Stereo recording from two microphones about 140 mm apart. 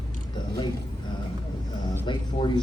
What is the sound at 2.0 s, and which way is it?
Speech, 35° left (ahead or behind).